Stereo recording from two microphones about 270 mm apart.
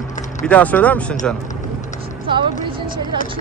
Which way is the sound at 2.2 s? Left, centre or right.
Centre.